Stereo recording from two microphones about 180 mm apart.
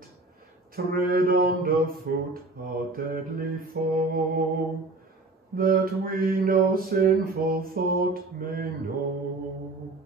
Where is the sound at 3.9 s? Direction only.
55° right (ahead or behind).